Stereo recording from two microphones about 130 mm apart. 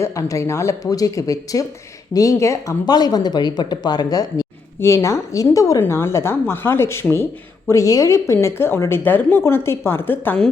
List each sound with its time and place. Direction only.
0.0 s a woman's voice: 25° left (ahead or behind)